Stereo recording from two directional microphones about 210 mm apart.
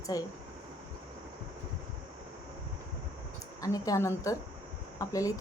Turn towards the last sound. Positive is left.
turn(degrees=15)  # may be behind; listen again after turning